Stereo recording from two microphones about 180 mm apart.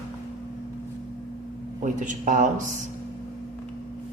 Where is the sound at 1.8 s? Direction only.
45° right (ahead or behind).